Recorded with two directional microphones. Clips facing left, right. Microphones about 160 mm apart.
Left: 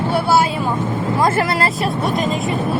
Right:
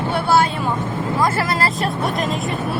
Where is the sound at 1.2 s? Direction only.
25° left (ahead or behind).